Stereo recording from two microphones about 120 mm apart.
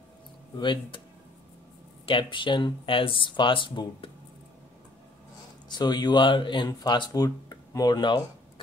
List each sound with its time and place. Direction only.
0.6 s speech: 40° left (ahead or behind)
2.0 s speech: 45° left (ahead or behind)
5.7 s speech: 35° left (ahead or behind)